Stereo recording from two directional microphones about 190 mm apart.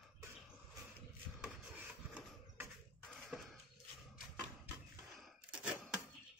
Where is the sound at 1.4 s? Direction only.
10° right (ahead or behind).